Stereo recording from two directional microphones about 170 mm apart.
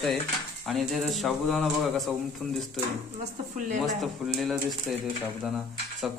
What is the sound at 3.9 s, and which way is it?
A man's voice, centre (ahead or behind).